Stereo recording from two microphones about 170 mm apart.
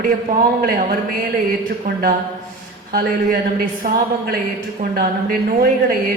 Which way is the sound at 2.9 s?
60° right (ahead or behind).